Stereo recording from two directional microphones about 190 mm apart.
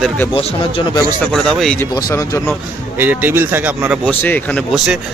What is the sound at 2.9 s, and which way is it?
Speech, 10° right (ahead or behind).